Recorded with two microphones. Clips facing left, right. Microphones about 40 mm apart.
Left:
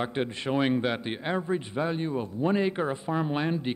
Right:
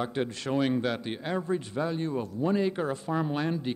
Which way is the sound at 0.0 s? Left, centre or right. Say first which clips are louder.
Left 1 dB; left.